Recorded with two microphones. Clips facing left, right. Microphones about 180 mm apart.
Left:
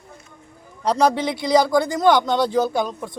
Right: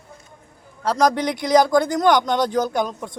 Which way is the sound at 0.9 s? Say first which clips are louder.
Even; 10° right (ahead or behind).